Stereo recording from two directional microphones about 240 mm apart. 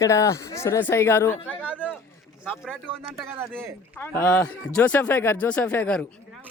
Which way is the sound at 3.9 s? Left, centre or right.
Centre.